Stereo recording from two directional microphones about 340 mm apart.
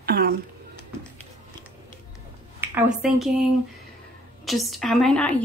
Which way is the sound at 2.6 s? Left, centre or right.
Centre.